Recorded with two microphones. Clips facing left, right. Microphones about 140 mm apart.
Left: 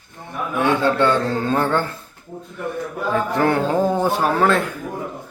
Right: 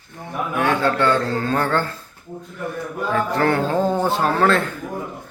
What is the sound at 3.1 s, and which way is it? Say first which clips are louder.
Speech: left 1 dB; 20° left (ahead or behind).